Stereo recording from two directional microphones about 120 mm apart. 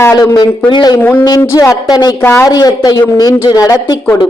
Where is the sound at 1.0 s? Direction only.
15° left (ahead or behind).